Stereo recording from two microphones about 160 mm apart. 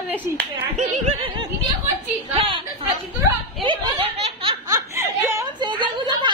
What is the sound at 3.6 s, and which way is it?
Snicker, 30° right (ahead or behind).